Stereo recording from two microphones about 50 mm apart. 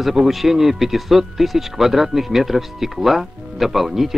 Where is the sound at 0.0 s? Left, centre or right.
Centre.